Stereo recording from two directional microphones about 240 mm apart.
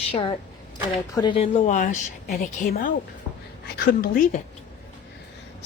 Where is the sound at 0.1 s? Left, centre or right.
Left.